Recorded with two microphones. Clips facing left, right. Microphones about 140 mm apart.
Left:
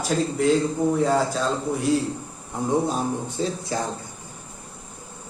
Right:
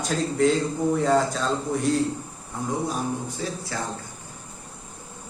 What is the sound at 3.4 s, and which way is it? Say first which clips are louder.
Speech: left 8 dB; 25° left (ahead or behind).